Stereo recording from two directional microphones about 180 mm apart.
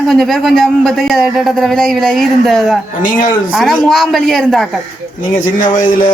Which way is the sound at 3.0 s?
50° left (ahead or behind).